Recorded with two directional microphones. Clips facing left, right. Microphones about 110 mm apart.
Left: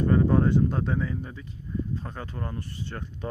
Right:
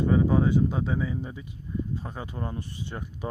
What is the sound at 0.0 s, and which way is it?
Speech, 5° right (ahead or behind).